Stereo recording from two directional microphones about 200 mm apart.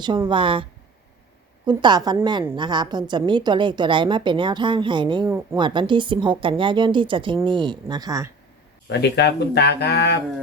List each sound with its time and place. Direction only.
0.0 s a woman's voice: 20° right (ahead or behind)
1.6 s a woman's voice: 20° right (ahead or behind)
8.9 s speech: 55° left (ahead or behind)